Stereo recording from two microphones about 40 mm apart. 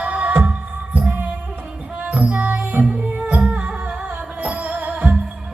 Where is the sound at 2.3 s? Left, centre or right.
Right.